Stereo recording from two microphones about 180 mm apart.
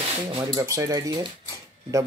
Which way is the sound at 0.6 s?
20° right (ahead or behind).